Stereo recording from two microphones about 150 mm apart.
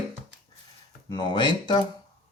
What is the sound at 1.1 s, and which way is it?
Speech, 30° left (ahead or behind).